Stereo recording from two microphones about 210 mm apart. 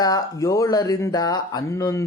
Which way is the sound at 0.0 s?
15° left (ahead or behind).